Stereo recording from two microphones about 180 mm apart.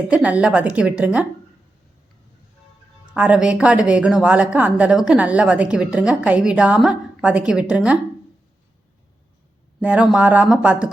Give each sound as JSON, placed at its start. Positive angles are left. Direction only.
{"t": 0.1, "sound": "a woman's voice", "side_deg": -5}
{"t": 3.2, "sound": "a woman's voice", "side_deg": -5}
{"t": 9.8, "sound": "a woman's voice", "side_deg": -5}